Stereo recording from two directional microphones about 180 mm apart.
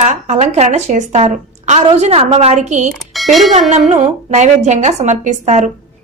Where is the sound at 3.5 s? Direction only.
40° right (ahead or behind).